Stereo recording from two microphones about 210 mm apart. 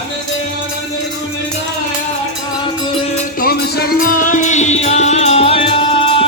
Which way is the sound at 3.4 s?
45° left (ahead or behind).